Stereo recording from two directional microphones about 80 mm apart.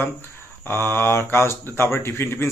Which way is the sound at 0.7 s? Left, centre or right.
Left.